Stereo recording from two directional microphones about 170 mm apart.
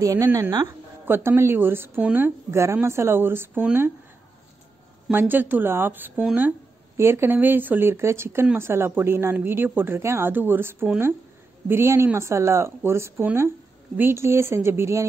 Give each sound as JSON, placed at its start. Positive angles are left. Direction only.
{"t": 0.0, "sound": "speech", "side_deg": -20}
{"t": 5.1, "sound": "speech", "side_deg": -10}